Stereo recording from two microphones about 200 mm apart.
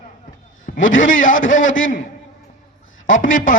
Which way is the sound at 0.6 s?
40° left (ahead or behind).